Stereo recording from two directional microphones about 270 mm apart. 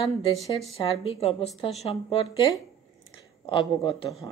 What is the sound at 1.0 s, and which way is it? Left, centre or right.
Speech, left.